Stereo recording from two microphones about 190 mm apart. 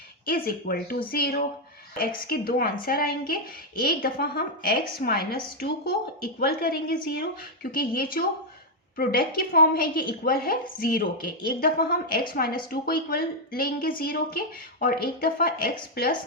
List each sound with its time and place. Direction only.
0.3 s a woman's voice: 50° left (ahead or behind)